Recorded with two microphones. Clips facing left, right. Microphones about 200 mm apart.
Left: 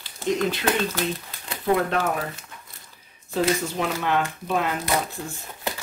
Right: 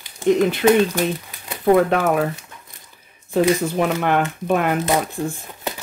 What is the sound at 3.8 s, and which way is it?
Speech, 55° right (ahead or behind).